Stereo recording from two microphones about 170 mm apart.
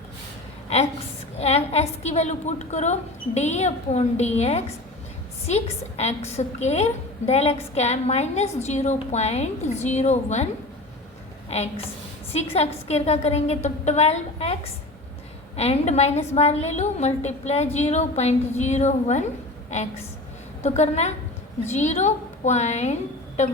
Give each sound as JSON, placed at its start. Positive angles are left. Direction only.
{"t": 1.4, "sound": "a woman's voice", "side_deg": 40}
{"t": 20.6, "sound": "a woman's voice", "side_deg": 40}